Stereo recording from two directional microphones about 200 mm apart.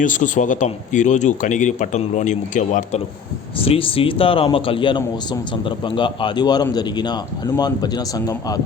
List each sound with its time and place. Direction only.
0.0 s speech: 40° left (ahead or behind)
3.6 s speech: 30° left (ahead or behind)